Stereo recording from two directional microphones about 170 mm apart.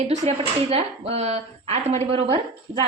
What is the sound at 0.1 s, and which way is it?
Speech, 40° right (ahead or behind).